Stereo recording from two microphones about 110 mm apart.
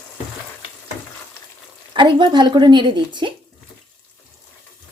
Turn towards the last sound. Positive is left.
turn(degrees=-45)  # may be behind; listen again after turning